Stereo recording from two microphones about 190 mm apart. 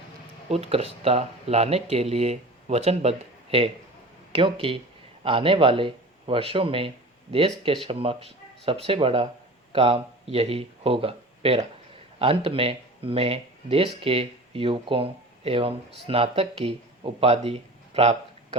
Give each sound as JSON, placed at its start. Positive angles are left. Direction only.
{"t": 0.4, "sound": "speech", "side_deg": -30}